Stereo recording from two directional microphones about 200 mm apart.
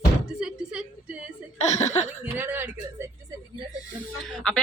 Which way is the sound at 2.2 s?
10° right (ahead or behind).